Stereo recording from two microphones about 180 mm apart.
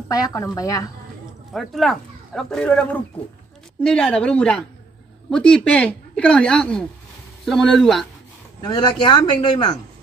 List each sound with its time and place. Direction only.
0.1 s a man's voice: 20° left (ahead or behind)
1.5 s a woman's voice: centre (ahead or behind)
8.5 s a man's voice: 25° left (ahead or behind)